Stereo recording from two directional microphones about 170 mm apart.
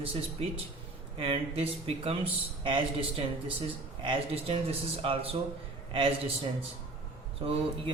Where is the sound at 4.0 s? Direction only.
30° right (ahead or behind).